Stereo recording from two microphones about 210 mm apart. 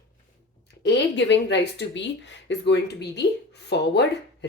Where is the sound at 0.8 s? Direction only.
55° left (ahead or behind).